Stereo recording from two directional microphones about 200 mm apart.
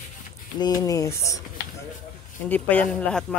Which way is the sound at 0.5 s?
20° left (ahead or behind).